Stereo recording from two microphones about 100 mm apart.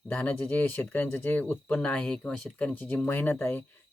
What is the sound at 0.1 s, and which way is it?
Speech, 10° left (ahead or behind).